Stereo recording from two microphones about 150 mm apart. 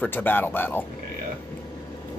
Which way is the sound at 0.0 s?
15° left (ahead or behind).